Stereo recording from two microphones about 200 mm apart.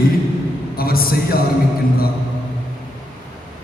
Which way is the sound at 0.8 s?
50° left (ahead or behind).